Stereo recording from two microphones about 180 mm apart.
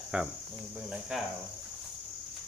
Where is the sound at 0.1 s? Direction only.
5° right (ahead or behind).